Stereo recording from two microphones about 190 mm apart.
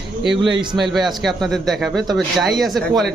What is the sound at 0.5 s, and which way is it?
Speech, 25° right (ahead or behind).